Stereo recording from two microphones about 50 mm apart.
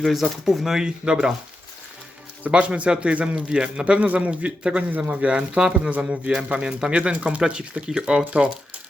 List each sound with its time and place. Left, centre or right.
0.0 s speech: centre
2.5 s speech: right